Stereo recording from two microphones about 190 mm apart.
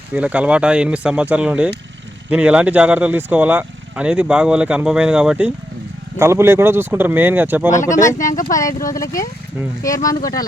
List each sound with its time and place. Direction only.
0.1 s speech: 5° right (ahead or behind)
7.9 s speech: 45° left (ahead or behind)
8.9 s speech: 15° left (ahead or behind)